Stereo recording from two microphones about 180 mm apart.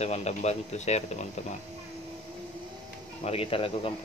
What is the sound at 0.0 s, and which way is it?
Speech, 35° left (ahead or behind).